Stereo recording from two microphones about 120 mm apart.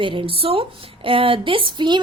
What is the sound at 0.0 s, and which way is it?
A woman's voice, 45° right (ahead or behind).